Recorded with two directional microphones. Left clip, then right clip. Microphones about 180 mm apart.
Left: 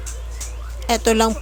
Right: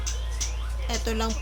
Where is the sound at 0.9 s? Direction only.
55° left (ahead or behind).